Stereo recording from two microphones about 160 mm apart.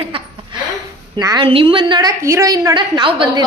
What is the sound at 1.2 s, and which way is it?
A woman's voice, 25° right (ahead or behind).